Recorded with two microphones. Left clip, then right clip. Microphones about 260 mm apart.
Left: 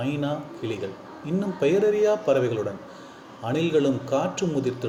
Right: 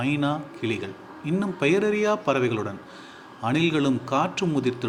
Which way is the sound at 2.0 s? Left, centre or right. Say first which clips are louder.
Left 2 dB; right.